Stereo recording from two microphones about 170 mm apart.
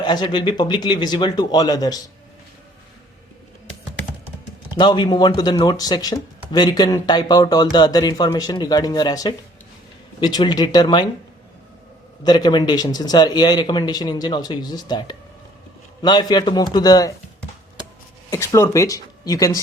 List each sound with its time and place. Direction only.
0.0 s speech: 25° left (ahead or behind)
4.8 s speech: 25° left (ahead or behind)
12.2 s speech: 25° left (ahead or behind)
18.3 s speech: 15° left (ahead or behind)